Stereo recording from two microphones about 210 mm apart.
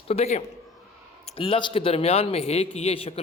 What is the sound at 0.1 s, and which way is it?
A man's voice, 30° left (ahead or behind).